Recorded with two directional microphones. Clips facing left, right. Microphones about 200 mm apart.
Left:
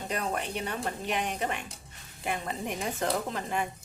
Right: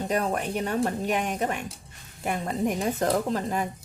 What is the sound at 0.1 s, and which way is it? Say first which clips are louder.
A woman's voice: right 4 dB; 45° right (ahead or behind).